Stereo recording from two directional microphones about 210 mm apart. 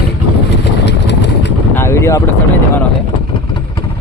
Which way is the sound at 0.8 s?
55° left (ahead or behind).